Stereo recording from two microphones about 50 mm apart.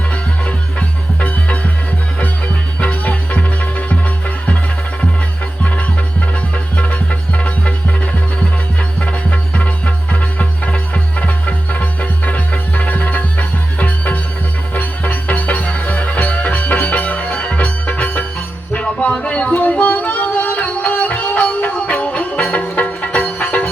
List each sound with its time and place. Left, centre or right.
0.4 s music: left
2.8 s music: left
6.7 s music: left
9.0 s music: left
20.3 s music: left